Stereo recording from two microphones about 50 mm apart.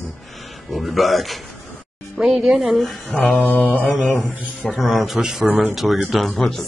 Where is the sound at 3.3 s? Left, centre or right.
Left.